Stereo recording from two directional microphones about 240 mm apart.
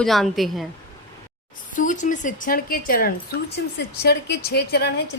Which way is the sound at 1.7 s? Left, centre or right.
Left.